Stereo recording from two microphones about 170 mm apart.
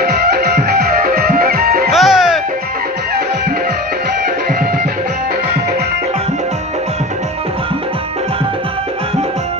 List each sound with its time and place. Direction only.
0.0 s music: 70° right (ahead or behind)
1.9 s music: centre (ahead or behind)